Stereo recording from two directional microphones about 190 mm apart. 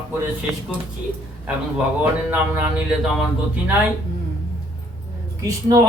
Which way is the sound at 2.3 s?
10° right (ahead or behind).